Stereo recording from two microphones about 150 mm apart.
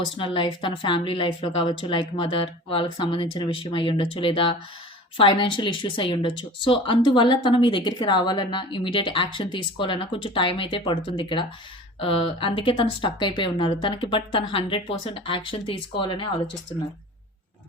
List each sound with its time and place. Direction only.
0.0 s speech: 35° left (ahead or behind)